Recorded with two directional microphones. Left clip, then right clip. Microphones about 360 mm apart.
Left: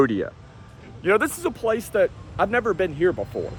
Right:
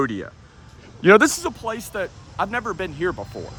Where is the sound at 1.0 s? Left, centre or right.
Right.